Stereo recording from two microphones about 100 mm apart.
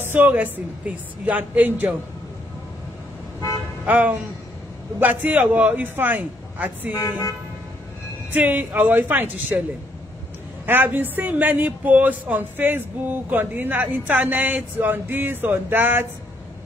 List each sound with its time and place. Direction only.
0.0 s speech: 20° right (ahead or behind)
3.8 s speech: 15° right (ahead or behind)
8.3 s speech: 15° right (ahead or behind)
10.7 s speech: 20° right (ahead or behind)